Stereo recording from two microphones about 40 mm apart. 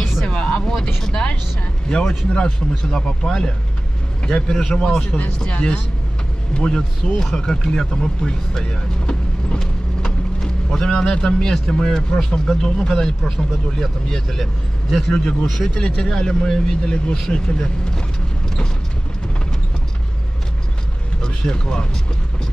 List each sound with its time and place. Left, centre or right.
0.2 s a sound: left
1.0 s speech: centre
2.7 s speech: centre
8.6 s vehicle: left
10.4 s boat: centre
11.1 s speech: left; by 15.7 s centre
15.7 s speech: left
21.2 s speech: centre